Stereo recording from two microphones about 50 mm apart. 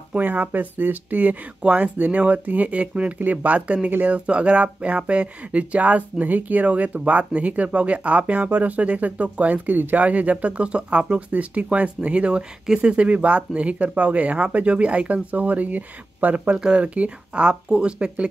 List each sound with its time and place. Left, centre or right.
0.2 s speech: right
1.6 s speech: right
16.5 s speech: right